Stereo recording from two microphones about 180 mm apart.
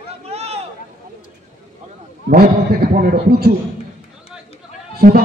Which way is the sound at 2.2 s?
60° right (ahead or behind).